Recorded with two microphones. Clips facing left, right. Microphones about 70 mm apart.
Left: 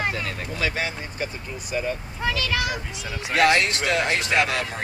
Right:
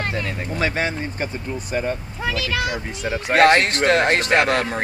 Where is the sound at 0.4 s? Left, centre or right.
Right.